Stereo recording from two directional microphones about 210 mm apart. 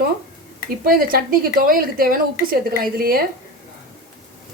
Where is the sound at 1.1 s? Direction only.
45° right (ahead or behind).